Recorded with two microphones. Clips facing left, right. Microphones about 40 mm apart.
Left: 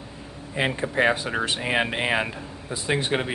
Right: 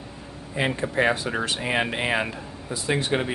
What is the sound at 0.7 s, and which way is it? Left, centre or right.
Speech, left.